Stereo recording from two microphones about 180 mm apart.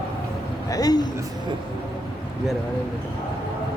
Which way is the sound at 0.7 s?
20° left (ahead or behind).